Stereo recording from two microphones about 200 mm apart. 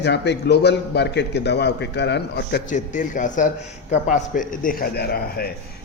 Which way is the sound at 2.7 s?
40° left (ahead or behind).